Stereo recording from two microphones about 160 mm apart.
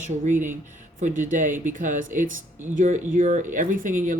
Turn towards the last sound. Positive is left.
turn(degrees=-55)  # may be behind; listen again after turning